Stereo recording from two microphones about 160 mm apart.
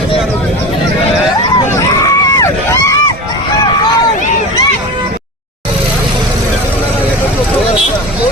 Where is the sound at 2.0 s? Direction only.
20° left (ahead or behind).